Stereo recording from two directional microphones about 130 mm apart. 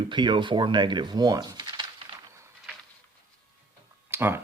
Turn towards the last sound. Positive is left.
turn(degrees=-15)  # may be behind; listen again after turning